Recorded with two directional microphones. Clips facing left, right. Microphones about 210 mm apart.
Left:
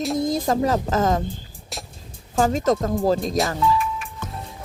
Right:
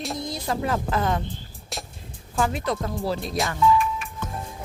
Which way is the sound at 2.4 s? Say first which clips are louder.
Left 6 dB; 40° left (ahead or behind).